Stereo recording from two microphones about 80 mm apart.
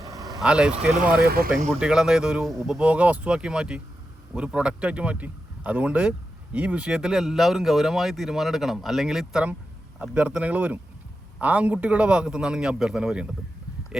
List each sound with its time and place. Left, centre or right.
0.0 s vehicle: right
0.3 s speech: centre
2.7 s speech: centre
10.0 s speech: centre